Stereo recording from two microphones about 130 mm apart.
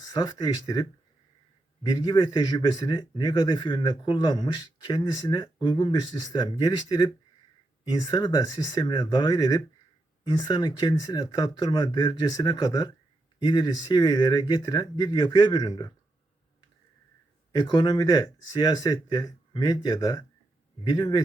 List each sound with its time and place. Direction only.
0.0 s speech: 30° left (ahead or behind)
17.6 s speech: 35° left (ahead or behind)